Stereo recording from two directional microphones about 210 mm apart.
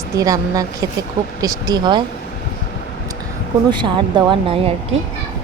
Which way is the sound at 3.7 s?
20° right (ahead or behind).